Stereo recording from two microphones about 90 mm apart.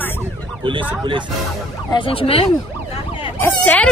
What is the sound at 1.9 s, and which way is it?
Speech, 85° left.